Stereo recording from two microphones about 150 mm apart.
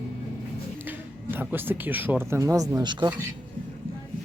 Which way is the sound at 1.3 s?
15° right (ahead or behind).